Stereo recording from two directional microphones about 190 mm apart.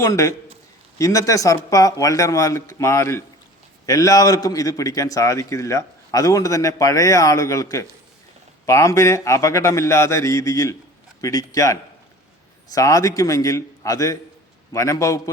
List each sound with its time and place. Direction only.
0.0 s a man's voice: 15° left (ahead or behind)